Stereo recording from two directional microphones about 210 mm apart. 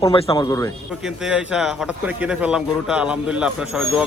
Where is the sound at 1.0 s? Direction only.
5° right (ahead or behind).